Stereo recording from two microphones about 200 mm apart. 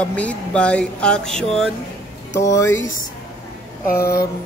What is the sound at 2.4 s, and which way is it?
Speech, 15° left (ahead or behind).